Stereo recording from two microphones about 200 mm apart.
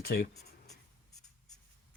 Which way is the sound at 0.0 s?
50° left (ahead or behind).